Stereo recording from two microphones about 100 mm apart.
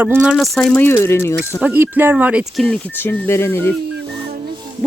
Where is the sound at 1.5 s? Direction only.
15° right (ahead or behind).